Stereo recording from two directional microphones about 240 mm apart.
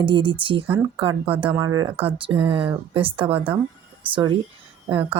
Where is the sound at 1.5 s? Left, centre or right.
Centre.